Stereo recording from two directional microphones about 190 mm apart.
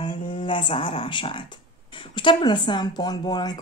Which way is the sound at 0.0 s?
25° left (ahead or behind).